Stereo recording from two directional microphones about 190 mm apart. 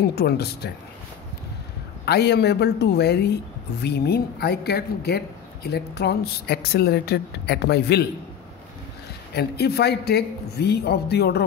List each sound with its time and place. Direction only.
0.1 s a woman's voice: 60° left (ahead or behind)
2.0 s a woman's voice: 60° left (ahead or behind)
9.3 s a woman's voice: 60° left (ahead or behind)